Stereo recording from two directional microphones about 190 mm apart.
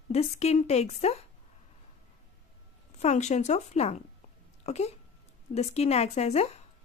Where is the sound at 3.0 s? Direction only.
35° left (ahead or behind).